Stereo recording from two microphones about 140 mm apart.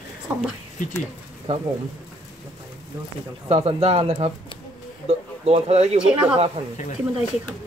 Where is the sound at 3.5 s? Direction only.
45° right (ahead or behind).